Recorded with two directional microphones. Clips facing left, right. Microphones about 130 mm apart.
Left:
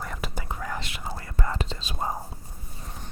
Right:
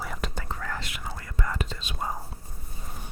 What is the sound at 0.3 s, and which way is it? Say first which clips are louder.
Whispering: left 1 dB; 15° left (ahead or behind).